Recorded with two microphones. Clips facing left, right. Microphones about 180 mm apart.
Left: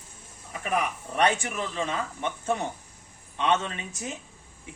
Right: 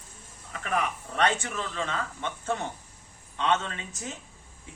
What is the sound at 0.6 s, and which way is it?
A man's voice, 15° left (ahead or behind).